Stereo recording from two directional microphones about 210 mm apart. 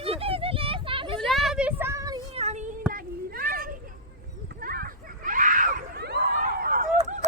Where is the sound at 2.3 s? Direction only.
30° right (ahead or behind).